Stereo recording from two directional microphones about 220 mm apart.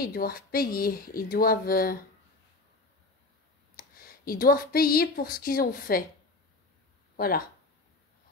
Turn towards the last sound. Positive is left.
turn(degrees=40)  # may be behind; listen again after turning